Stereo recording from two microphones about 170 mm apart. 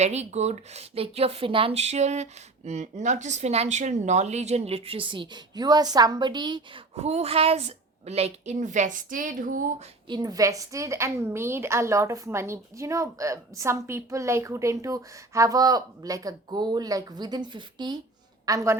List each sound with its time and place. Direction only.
0.0 s speech: 40° right (ahead or behind)
6.9 s a woman's voice: 40° right (ahead or behind)
10.1 s a woman's voice: 25° right (ahead or behind)